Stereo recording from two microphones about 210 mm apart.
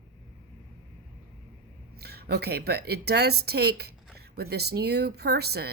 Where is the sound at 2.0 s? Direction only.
50° right (ahead or behind).